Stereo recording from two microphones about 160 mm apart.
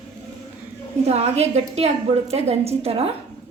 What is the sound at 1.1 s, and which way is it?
A woman's voice, 40° right (ahead or behind).